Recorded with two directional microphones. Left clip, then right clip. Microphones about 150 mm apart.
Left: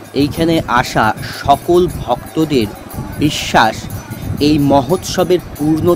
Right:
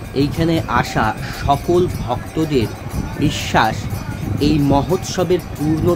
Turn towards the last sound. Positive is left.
turn(degrees=65)  # may be behind; listen again after turning